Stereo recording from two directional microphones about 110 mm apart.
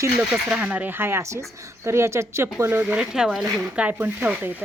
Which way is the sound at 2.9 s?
5° right (ahead or behind).